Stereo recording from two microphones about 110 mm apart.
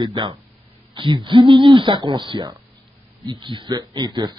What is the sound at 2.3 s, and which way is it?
Speech, 55° right (ahead or behind).